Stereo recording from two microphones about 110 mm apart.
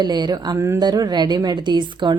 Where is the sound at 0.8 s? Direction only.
40° right (ahead or behind).